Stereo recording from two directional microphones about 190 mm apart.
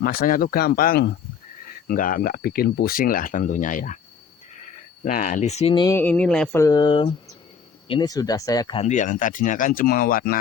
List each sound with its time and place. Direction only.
0.0 s speech: 50° left (ahead or behind)
5.0 s speech: 45° left (ahead or behind)
5.8 s speech: 10° left (ahead or behind)
6.6 s speech: 20° left (ahead or behind); by 10.4 s 50° left (ahead or behind)